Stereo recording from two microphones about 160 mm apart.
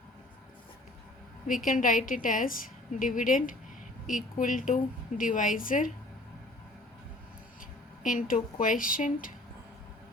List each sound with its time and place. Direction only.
1.5 s a woman's voice: 55° left (ahead or behind)
8.0 s a woman's voice: 55° left (ahead or behind)